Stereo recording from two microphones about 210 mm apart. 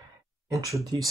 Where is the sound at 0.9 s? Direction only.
20° right (ahead or behind).